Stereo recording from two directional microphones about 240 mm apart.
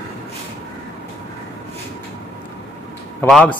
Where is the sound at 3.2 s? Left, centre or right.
Centre.